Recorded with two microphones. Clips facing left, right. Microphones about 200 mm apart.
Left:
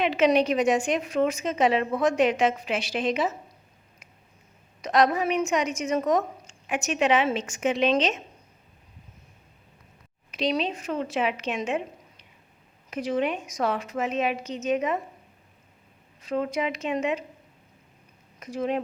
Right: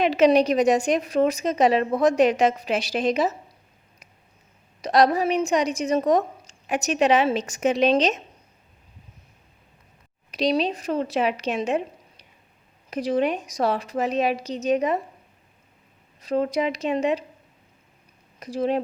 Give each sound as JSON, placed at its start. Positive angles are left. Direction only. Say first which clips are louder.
{"t": 0.0, "sound": "a woman's voice", "louder": "right 4 dB", "side_deg": -40}
{"t": 4.8, "sound": "a woman's voice", "louder": "right 3 dB", "side_deg": -35}
{"t": 10.3, "sound": "a woman's voice", "louder": "right 4 dB", "side_deg": -35}
{"t": 16.2, "sound": "a woman's voice", "louder": "right 4 dB", "side_deg": -35}
{"t": 18.3, "sound": "speech", "louder": "right 4 dB", "side_deg": -35}